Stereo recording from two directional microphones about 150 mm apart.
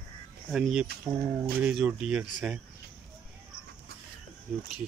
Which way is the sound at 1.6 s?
5° right (ahead or behind).